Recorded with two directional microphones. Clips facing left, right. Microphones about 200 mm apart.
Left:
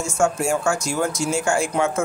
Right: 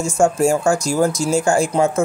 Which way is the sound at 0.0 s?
35° right (ahead or behind).